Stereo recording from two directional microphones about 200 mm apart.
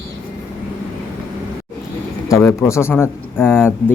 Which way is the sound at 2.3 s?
15° left (ahead or behind).